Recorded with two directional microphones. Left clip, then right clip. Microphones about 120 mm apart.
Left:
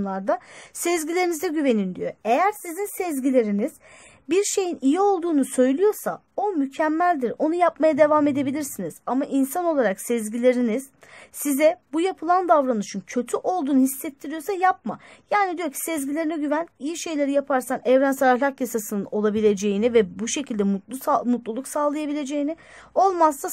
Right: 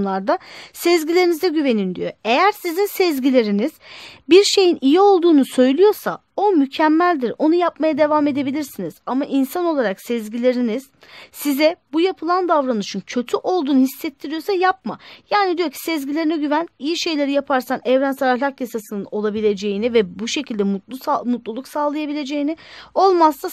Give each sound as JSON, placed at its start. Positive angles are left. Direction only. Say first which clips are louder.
{"t": 0.0, "sound": "speech", "louder": "right 5 dB", "side_deg": -40}
{"t": 1.9, "sound": "speech", "louder": "right 3 dB", "side_deg": -40}
{"t": 2.7, "sound": "speech", "louder": "right 9 dB", "side_deg": -90}
{"t": 3.3, "sound": "speech", "louder": "right 4 dB", "side_deg": -40}
{"t": 19.8, "sound": "speech", "louder": "right 2 dB", "side_deg": -25}